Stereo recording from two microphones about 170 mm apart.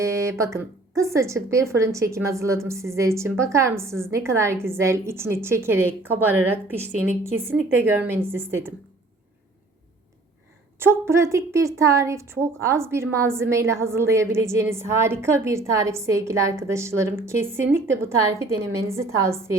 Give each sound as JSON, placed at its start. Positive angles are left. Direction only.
{"t": 0.0, "sound": "a woman's voice", "side_deg": -15}
{"t": 10.8, "sound": "a woman's voice", "side_deg": -15}